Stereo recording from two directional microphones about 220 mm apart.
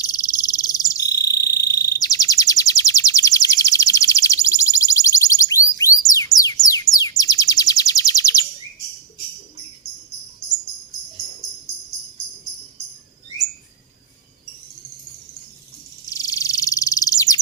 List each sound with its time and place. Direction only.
0.0 s frog: 15° left (ahead or behind)
6.9 s a sound: 15° left (ahead or behind)
16.0 s bird: 15° left (ahead or behind)